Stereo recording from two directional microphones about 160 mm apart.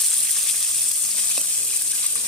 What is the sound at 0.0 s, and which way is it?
Frying, centre (ahead or behind).